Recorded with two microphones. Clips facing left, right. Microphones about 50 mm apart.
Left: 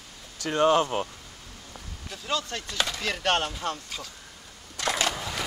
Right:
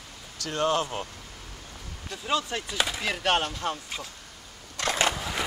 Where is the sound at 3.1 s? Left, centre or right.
Centre.